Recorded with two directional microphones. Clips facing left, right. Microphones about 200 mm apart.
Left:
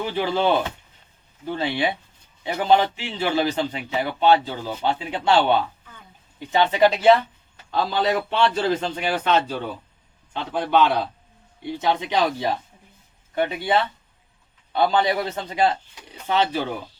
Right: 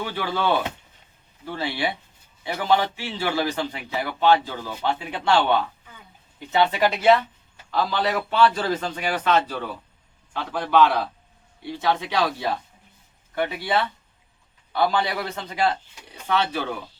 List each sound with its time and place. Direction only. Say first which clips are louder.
0.0 s a man's voice: left 4 dB; 20° left (ahead or behind)
1.5 s a man's voice: left 3 dB; 20° left (ahead or behind)